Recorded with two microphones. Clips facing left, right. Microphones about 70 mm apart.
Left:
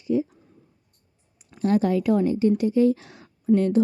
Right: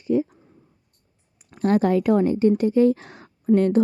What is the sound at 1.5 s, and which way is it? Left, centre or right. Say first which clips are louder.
A woman's voice: right 2 dB; right.